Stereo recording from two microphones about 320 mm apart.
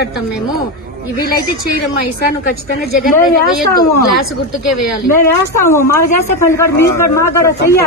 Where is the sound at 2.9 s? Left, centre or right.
Left.